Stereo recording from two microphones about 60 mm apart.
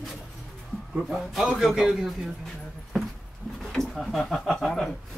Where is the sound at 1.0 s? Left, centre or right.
Centre.